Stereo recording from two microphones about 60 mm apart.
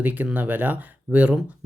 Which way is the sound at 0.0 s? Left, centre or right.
Right.